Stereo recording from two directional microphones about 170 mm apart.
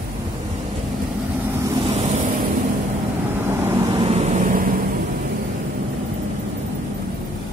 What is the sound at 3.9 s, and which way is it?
Vehicle, 35° right (ahead or behind).